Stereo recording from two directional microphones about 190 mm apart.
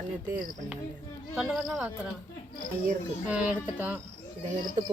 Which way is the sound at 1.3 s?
5° right (ahead or behind).